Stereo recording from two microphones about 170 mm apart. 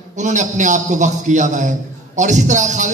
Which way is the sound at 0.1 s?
45° right (ahead or behind).